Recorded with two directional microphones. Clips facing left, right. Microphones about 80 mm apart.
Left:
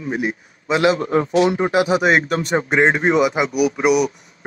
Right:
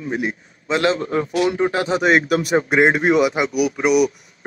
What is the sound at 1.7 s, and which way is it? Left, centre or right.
Speech, centre.